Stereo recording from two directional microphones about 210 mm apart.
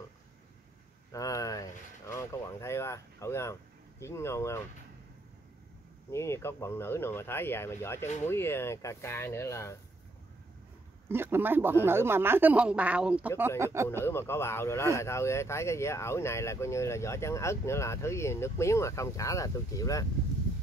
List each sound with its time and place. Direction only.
1.1 s speech: 15° left (ahead or behind)
6.1 s speech: 15° left (ahead or behind)
11.1 s speech: 10° right (ahead or behind)
14.0 s speech: 10° left (ahead or behind)